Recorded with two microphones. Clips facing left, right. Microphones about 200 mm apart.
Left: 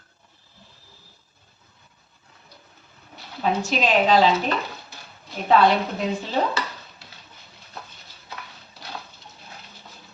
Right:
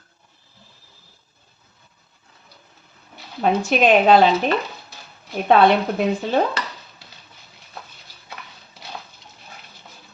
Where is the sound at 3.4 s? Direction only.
60° right (ahead or behind).